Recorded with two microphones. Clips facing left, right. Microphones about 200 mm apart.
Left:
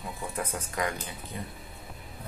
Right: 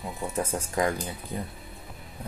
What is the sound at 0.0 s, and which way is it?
Speech, 25° right (ahead or behind).